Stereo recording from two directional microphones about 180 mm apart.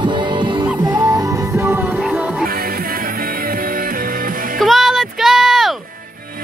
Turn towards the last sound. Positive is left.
turn(degrees=0)  # may be behind; listen again after turning